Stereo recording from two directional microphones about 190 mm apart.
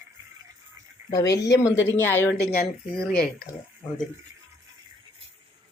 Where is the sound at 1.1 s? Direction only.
20° left (ahead or behind).